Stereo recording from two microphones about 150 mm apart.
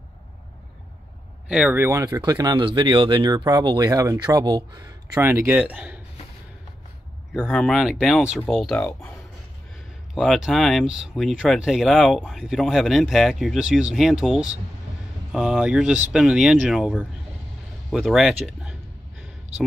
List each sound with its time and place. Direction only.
1.5 s speech: 10° right (ahead or behind); by 5.2 s 30° right (ahead or behind)
5.2 s speech: 15° right (ahead or behind)
7.3 s speech: centre (ahead or behind)
8.7 s speech: 10° left (ahead or behind)
10.1 s speech: centre (ahead or behind)